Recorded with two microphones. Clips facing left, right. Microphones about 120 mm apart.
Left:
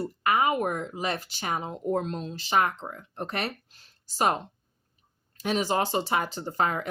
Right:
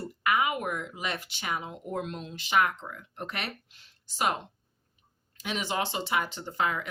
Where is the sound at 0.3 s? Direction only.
35° left (ahead or behind).